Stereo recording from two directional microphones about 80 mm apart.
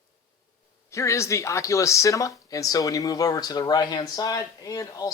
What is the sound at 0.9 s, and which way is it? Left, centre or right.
A man's voice, left.